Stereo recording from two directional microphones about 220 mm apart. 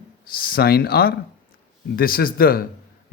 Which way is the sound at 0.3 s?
45° left (ahead or behind).